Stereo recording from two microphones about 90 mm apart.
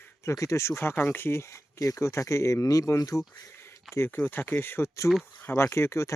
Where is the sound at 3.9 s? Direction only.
25° left (ahead or behind).